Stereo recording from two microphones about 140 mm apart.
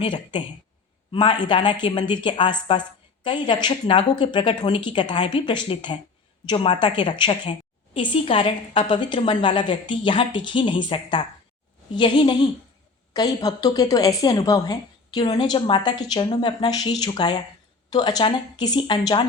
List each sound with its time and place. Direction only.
0.0 s a woman's voice: 35° left (ahead or behind)